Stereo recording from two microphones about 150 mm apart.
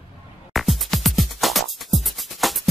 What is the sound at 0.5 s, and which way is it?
Music, centre (ahead or behind).